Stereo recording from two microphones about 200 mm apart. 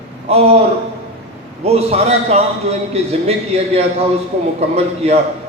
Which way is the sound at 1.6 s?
30° right (ahead or behind).